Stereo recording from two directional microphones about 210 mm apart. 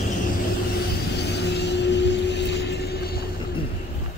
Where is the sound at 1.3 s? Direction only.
55° left (ahead or behind).